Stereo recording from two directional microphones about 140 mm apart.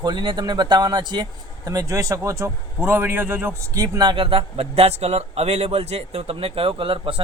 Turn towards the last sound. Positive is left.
turn(degrees=-40)  # may be behind; listen again after turning